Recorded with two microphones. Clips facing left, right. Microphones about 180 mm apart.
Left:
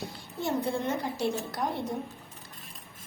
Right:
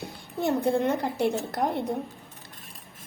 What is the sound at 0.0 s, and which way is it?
A woman's voice, 60° right (ahead or behind).